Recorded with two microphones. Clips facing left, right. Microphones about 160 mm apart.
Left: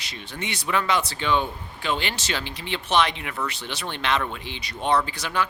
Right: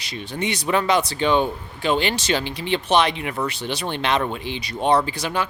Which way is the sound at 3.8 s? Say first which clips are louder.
Right 3 dB; 30° right (ahead or behind).